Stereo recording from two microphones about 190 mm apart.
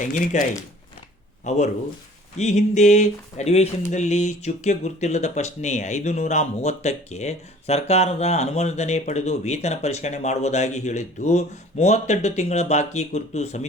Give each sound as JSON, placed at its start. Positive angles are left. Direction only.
{"t": 0.0, "sound": "speech", "side_deg": 45}
{"t": 1.5, "sound": "speech", "side_deg": 40}